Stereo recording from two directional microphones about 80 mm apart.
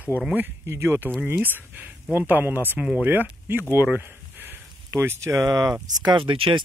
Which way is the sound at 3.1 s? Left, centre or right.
Right.